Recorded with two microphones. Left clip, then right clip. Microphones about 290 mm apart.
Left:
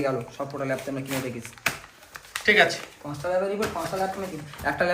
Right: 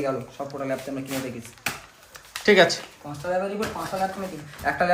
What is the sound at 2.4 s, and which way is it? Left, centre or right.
Speech, centre.